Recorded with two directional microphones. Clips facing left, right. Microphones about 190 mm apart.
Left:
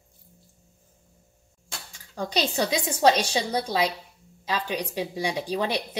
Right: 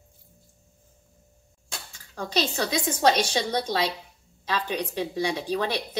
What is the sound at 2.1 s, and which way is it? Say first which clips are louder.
A woman's voice: left 1 dB; 15° left (ahead or behind).